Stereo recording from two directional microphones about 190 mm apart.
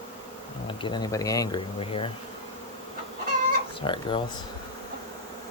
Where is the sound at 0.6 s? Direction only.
25° left (ahead or behind).